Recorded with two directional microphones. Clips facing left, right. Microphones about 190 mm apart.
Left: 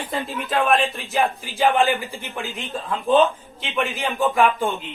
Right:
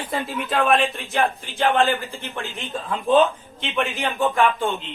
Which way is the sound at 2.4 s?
Centre (ahead or behind).